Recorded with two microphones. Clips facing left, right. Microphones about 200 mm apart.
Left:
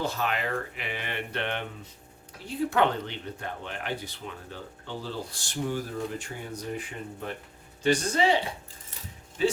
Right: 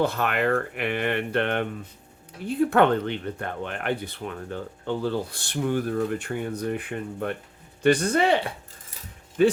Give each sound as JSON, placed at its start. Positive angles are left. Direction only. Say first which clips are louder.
{"t": 0.0, "sound": "speech", "louder": "right 6 dB", "side_deg": -60}